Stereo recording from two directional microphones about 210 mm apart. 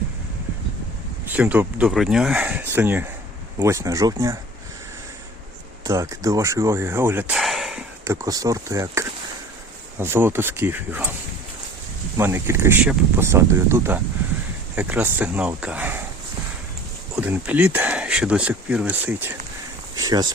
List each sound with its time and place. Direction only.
1.3 s speech: 10° right (ahead or behind)
5.8 s speech: 15° right (ahead or behind)
8.0 s speech: 15° right (ahead or behind)
12.1 s speech: 10° right (ahead or behind)
17.2 s speech: 5° right (ahead or behind)